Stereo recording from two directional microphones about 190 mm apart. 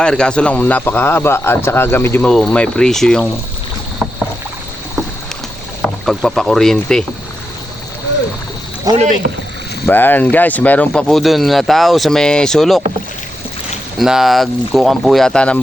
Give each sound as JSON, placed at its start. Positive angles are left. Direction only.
{"t": 0.0, "sound": "a man's voice", "side_deg": 5}
{"t": 6.1, "sound": "speech", "side_deg": 0}
{"t": 8.9, "sound": "speech", "side_deg": -20}
{"t": 9.8, "sound": "speech", "side_deg": 10}
{"t": 14.0, "sound": "speech", "side_deg": 0}